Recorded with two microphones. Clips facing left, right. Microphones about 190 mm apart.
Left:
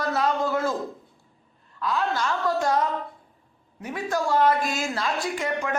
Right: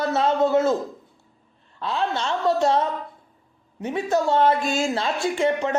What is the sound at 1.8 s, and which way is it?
Speech, 25° right (ahead or behind).